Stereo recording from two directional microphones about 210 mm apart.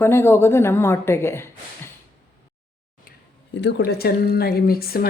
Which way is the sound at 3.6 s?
55° left (ahead or behind).